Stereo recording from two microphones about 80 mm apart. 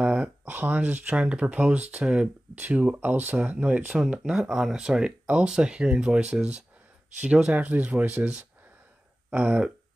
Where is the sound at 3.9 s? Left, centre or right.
Centre.